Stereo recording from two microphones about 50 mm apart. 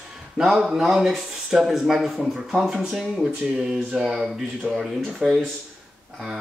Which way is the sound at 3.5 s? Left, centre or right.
Right.